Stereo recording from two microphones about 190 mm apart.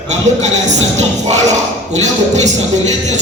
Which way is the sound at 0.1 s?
35° right (ahead or behind).